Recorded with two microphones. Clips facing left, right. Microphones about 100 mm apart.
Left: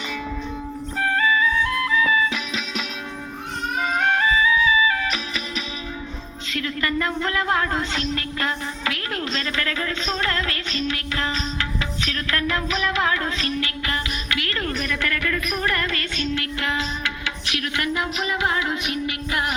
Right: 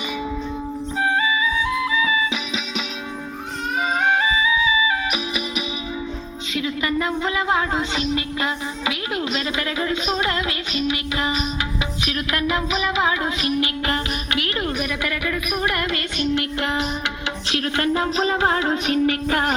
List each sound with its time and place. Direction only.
1.0 s music: 15° right (ahead or behind)
4.0 s music: 10° right (ahead or behind)
6.5 s a sound: 10° right (ahead or behind)
12.0 s music: 15° right (ahead or behind)
13.8 s a woman's voice: 25° right (ahead or behind)
17.5 s music: 30° right (ahead or behind)